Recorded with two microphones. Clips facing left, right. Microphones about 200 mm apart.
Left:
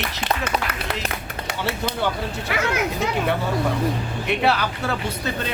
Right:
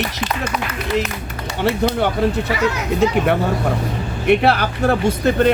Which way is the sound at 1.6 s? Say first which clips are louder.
Right 9 dB; 55° right (ahead or behind).